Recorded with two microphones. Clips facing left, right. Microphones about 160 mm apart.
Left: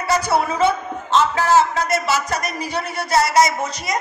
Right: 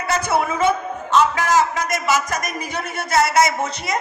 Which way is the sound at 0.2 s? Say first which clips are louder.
Left 1 dB; 20° right (ahead or behind).